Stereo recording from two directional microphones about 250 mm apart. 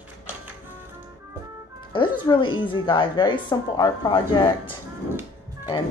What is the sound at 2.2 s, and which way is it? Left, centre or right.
A woman's voice, centre.